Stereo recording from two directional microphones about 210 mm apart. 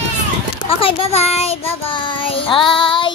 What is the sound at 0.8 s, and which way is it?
Child singing, 25° left (ahead or behind).